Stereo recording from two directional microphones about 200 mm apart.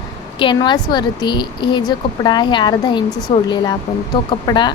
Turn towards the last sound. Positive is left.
turn(degrees=20)  # may be behind; listen again after turning